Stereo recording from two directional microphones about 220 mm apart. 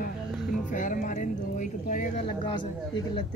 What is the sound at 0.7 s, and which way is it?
Music, 35° left (ahead or behind).